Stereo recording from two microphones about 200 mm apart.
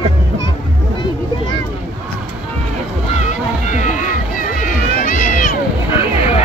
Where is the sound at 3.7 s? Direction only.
40° left (ahead or behind).